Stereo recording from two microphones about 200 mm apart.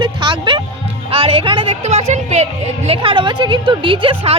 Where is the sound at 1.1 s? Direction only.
30° right (ahead or behind).